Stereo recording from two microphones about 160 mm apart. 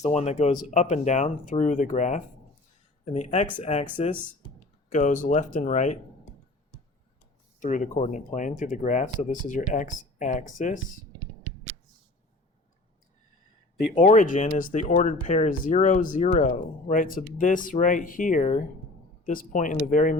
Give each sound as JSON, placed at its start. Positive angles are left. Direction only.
{"t": 0.0, "sound": "speech", "side_deg": 45}
{"t": 7.6, "sound": "speech", "side_deg": 50}
{"t": 14.0, "sound": "speech", "side_deg": 50}